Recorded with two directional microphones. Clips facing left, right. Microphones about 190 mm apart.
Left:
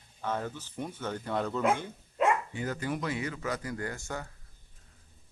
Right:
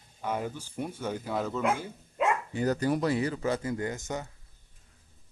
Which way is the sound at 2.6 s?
40° right (ahead or behind).